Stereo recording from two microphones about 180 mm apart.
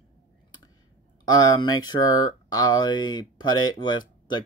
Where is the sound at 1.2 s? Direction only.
20° left (ahead or behind).